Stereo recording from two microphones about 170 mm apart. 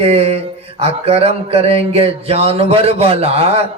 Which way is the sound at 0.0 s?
35° right (ahead or behind).